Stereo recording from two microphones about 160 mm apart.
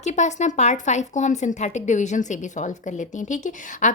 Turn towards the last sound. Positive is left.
turn(degrees=50)  # may be behind; listen again after turning